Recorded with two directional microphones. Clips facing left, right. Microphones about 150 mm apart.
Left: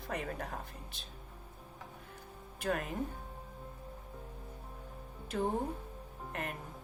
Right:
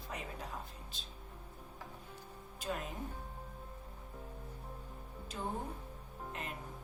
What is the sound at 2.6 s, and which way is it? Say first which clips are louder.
Speech: left 5 dB; 65° left (ahead or behind).